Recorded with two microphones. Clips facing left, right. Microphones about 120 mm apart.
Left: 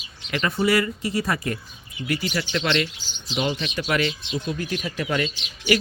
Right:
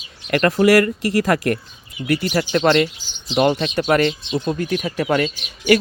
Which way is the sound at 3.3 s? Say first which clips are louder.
Right 9 dB; 60° right (ahead or behind).